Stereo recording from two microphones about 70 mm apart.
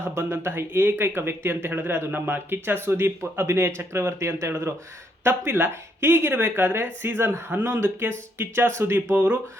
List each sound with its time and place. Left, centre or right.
0.0 s speech: right
5.2 s speech: right
9.1 s speech: right